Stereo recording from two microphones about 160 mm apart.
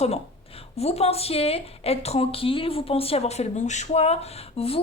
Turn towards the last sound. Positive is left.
turn(degrees=40)  # may be behind; listen again after turning